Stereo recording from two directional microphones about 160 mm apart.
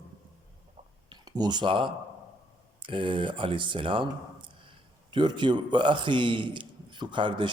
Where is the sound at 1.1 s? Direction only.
25° right (ahead or behind).